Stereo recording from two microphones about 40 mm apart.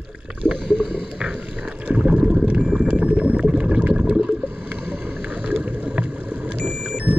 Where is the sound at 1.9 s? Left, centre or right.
Right.